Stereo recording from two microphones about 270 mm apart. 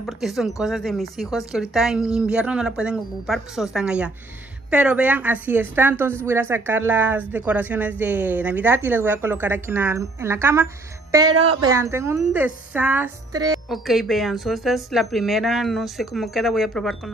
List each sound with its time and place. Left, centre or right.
0.0 s a woman's voice: centre
13.7 s a woman's voice: centre